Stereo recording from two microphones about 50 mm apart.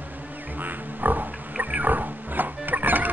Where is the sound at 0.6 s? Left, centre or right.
Right.